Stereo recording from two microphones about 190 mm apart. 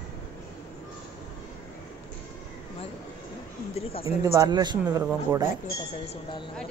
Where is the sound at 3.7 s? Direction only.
30° left (ahead or behind).